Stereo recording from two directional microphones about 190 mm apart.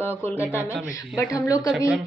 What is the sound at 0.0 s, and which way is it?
A woman's voice, 10° left (ahead or behind).